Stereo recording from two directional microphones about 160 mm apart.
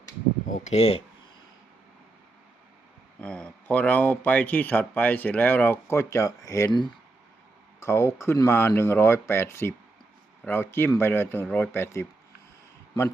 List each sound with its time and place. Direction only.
0.5 s speech: 45° left (ahead or behind)
3.2 s speech: 5° left (ahead or behind); by 6.9 s 30° left (ahead or behind)
7.8 s speech: 15° left (ahead or behind)